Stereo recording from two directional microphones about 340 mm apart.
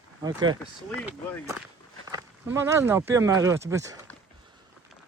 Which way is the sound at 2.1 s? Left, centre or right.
Centre.